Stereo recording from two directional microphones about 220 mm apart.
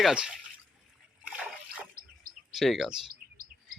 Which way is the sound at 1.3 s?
5° right (ahead or behind).